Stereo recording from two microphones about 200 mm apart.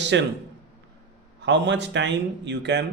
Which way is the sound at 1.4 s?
60° right (ahead or behind).